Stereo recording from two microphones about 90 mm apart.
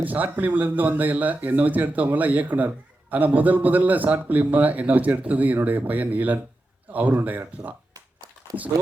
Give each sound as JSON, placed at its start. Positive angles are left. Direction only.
{"t": 0.0, "sound": "speech", "side_deg": -20}